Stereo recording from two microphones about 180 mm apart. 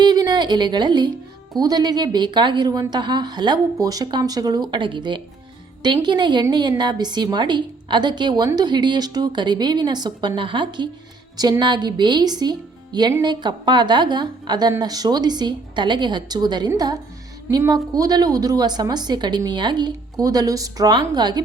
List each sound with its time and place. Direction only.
0.0 s speech: 20° right (ahead or behind)